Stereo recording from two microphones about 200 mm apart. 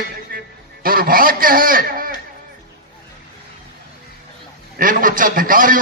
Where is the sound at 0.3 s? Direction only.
45° right (ahead or behind).